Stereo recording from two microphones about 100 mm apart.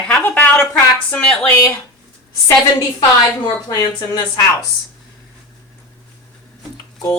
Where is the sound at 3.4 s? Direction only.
40° left (ahead or behind).